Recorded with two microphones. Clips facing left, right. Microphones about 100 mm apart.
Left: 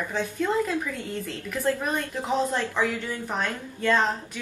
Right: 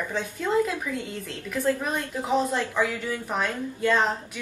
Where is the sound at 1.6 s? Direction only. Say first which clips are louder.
Even; 5° right (ahead or behind).